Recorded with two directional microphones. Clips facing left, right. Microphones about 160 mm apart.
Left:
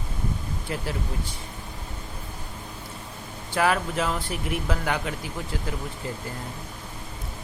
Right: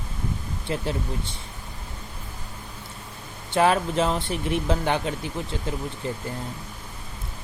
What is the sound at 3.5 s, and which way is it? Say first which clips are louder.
Speech: right 3 dB; 25° right (ahead or behind).